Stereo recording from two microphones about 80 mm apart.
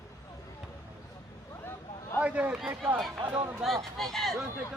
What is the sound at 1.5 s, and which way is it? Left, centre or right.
Vehicle, left.